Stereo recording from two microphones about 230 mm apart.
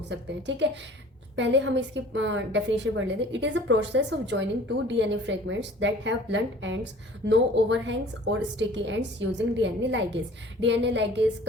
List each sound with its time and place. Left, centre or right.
0.1 s a woman's voice: right